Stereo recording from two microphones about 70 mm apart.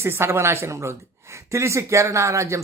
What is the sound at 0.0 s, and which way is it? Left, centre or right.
Speech, right.